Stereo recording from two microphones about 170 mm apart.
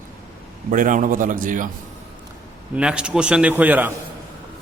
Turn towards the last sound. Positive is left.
turn(degrees=-10)  # may be behind; listen again after turning